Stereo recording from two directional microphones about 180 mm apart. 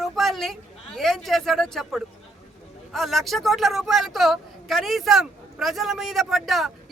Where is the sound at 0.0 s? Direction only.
Centre (ahead or behind).